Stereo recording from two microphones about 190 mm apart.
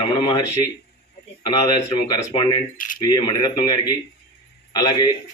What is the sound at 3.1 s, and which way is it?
Speech, 20° left (ahead or behind).